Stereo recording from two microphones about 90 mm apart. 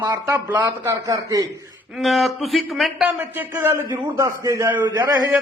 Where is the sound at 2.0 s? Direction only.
Centre (ahead or behind).